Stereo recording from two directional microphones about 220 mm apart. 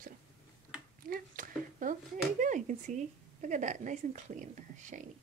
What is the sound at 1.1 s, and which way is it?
Speech, 40° right (ahead or behind).